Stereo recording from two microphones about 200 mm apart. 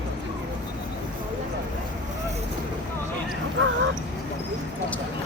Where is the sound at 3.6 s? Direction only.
65° right (ahead or behind).